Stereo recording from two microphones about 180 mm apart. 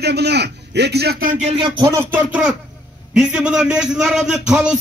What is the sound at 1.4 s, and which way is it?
Speech, 30° right (ahead or behind).